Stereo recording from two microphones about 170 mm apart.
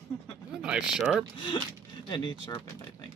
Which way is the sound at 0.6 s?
5° right (ahead or behind).